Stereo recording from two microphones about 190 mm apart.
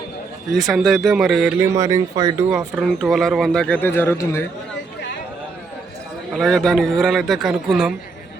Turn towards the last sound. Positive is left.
turn(degrees=-5)  # may be behind; listen again after turning